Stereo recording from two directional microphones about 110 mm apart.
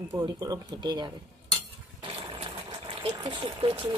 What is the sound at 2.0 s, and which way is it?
Water, 50° right (ahead or behind).